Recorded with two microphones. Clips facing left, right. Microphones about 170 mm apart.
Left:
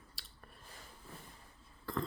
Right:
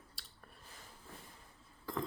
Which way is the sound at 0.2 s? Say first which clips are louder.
Left 1 dB; centre (ahead or behind).